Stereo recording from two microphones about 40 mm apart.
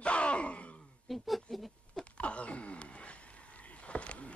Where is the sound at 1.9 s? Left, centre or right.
Left.